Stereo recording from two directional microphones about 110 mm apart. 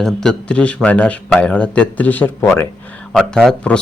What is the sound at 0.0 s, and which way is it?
Speech, 5° left (ahead or behind).